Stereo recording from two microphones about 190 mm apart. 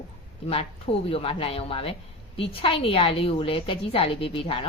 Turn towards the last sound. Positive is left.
turn(degrees=30)  # may be behind; listen again after turning